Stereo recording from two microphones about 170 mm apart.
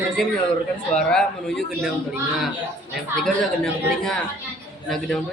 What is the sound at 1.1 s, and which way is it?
Speech, centre (ahead or behind).